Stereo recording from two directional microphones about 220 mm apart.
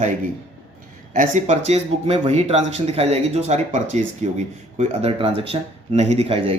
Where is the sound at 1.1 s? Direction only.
35° right (ahead or behind).